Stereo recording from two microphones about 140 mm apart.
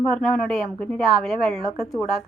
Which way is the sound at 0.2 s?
5° left (ahead or behind).